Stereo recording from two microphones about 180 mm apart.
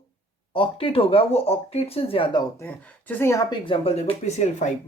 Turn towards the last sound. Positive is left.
turn(degrees=40)  # may be behind; listen again after turning